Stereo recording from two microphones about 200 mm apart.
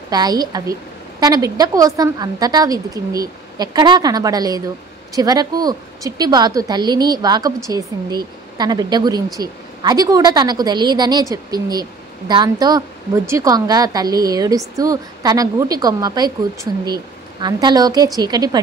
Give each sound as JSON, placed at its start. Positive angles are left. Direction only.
{"t": 0.1, "sound": "a woman's voice", "side_deg": -20}